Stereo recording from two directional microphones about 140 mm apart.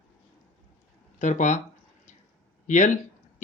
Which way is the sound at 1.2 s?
60° left (ahead or behind).